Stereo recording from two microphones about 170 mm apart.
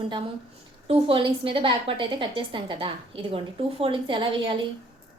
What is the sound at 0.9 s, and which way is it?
A woman's voice, 35° right (ahead or behind).